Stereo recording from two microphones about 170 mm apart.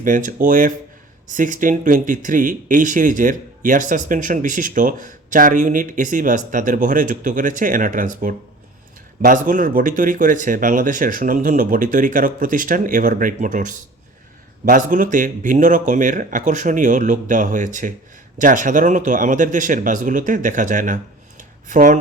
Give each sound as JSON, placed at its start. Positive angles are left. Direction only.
{"t": 0.0, "sound": "speech", "side_deg": -50}